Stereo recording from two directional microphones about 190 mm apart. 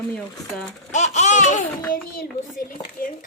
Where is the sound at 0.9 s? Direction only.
40° left (ahead or behind).